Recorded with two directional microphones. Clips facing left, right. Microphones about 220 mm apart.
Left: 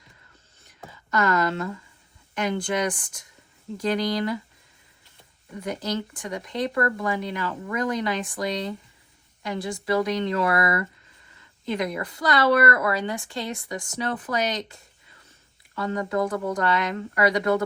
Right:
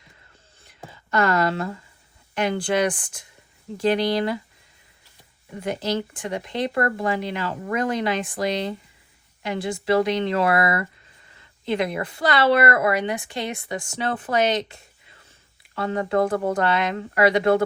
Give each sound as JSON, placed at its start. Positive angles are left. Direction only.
{"t": 0.9, "sound": "a sound", "side_deg": -30}
{"t": 2.3, "sound": "speech", "side_deg": -30}
{"t": 3.8, "sound": "a woman's voice", "side_deg": -25}
{"t": 5.6, "sound": "a woman's voice", "side_deg": -25}
{"t": 9.4, "sound": "a woman's voice", "side_deg": -25}